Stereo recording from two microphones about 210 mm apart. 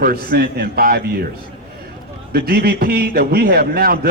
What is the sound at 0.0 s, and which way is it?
A man's voice, 45° right (ahead or behind).